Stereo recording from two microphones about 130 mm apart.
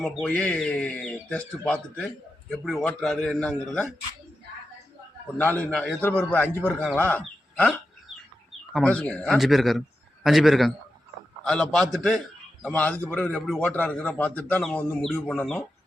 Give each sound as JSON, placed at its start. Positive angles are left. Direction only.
{"t": 0.0, "sound": "a man's voice", "side_deg": 10}
{"t": 5.4, "sound": "a man's voice", "side_deg": 15}
{"t": 12.6, "sound": "speech", "side_deg": 10}